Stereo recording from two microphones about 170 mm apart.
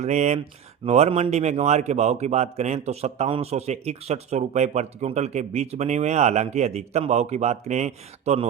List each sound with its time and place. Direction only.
0.0 s a man's voice: 40° right (ahead or behind)